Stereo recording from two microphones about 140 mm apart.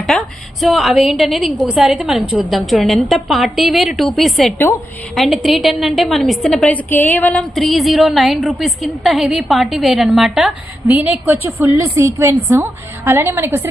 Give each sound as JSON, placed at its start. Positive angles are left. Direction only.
{"t": 0.0, "sound": "a woman's voice", "side_deg": 0}
{"t": 7.5, "sound": "a woman's voice", "side_deg": 0}
{"t": 10.9, "sound": "a woman's voice", "side_deg": -15}